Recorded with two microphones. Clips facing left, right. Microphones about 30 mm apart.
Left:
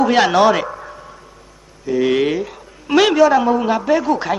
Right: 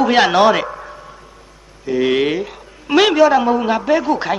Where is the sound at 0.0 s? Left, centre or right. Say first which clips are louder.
Right 1 dB; right.